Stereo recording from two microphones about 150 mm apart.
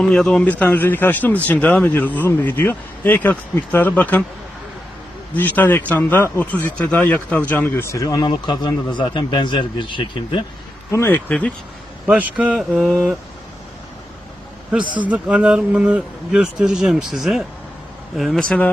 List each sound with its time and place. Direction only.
0.0 s a man's voice: 5° left (ahead or behind)
5.3 s a man's voice: 10° left (ahead or behind); by 10.4 s 35° left (ahead or behind)
10.9 s a man's voice: 15° left (ahead or behind)
12.0 s a man's voice: 10° right (ahead or behind)
14.7 s a man's voice: 10° right (ahead or behind)